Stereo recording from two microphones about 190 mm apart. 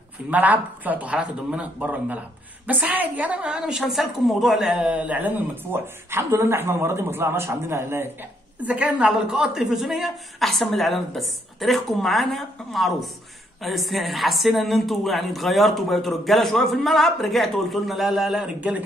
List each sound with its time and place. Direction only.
0.3 s a woman's voice: 10° right (ahead or behind)